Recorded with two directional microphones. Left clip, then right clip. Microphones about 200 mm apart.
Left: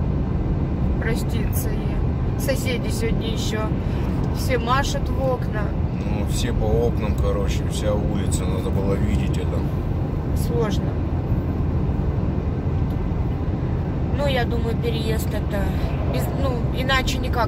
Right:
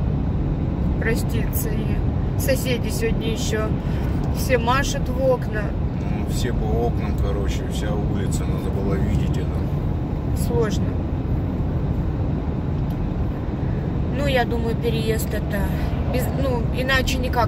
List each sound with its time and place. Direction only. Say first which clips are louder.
16.4 s speech: even; 20° right (ahead or behind)